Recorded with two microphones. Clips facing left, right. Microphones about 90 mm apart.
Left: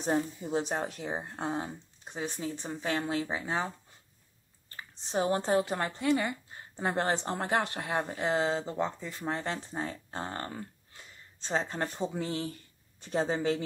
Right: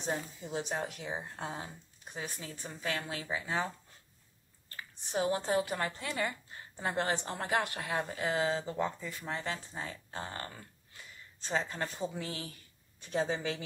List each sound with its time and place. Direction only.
0.0 s speech: 35° left (ahead or behind)
4.7 s speech: 35° left (ahead or behind)
5.9 s speech: 20° left (ahead or behind)
6.8 s speech: 35° left (ahead or behind)